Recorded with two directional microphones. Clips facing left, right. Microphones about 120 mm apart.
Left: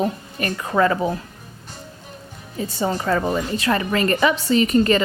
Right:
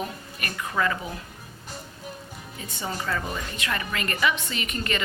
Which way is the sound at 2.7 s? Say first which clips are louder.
Left 9 dB; 40° left (ahead or behind).